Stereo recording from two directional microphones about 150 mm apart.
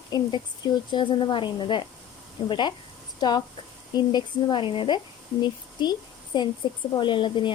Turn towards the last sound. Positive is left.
turn(degrees=35)  # may be behind; listen again after turning